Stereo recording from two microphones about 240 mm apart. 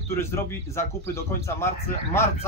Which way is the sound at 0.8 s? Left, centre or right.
Centre.